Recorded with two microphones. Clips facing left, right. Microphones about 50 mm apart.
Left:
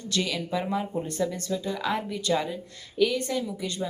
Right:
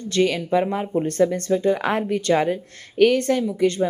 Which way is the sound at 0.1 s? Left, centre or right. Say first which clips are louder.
Right 9 dB; right.